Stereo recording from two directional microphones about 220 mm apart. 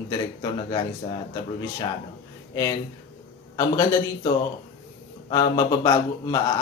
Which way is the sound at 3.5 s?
15° left (ahead or behind).